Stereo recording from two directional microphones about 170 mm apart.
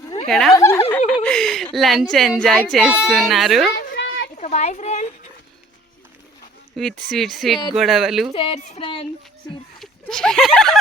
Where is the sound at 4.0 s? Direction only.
90° left.